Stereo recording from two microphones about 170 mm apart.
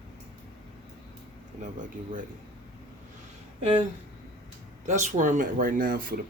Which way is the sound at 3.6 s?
35° right (ahead or behind).